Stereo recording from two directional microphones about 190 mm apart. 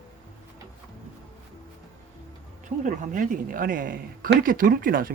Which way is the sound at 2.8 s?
45° right (ahead or behind).